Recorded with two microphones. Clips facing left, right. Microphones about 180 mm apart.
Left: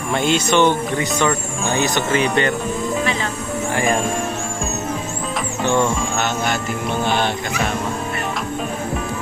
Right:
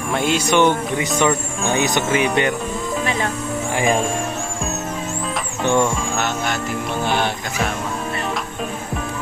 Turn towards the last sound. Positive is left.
turn(degrees=-5)  # may be behind; listen again after turning